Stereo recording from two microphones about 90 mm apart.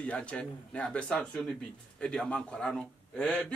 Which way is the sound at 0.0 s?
15° left (ahead or behind).